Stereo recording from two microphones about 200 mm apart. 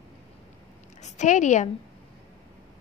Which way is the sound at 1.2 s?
35° left (ahead or behind).